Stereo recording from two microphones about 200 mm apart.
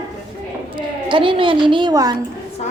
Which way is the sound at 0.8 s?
25° right (ahead or behind).